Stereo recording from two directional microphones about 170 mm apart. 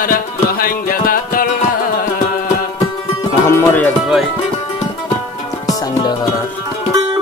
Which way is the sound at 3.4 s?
15° left (ahead or behind).